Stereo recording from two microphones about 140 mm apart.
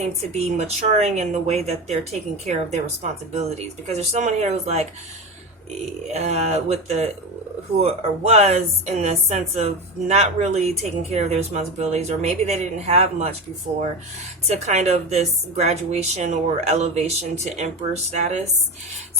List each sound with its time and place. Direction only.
0.0 s speech: 50° right (ahead or behind)
3.0 s speech: 50° right (ahead or behind)
6.1 s speech: 50° right (ahead or behind)
14.4 s speech: 50° right (ahead or behind)